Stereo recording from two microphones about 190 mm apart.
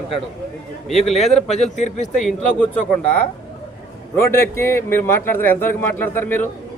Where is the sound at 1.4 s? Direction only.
35° left (ahead or behind).